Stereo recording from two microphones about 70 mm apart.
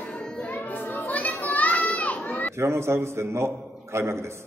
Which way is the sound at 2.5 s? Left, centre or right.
Right.